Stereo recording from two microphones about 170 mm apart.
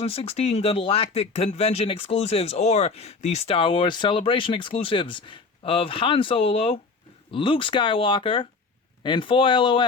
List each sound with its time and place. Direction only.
0.0 s speech: 35° left (ahead or behind)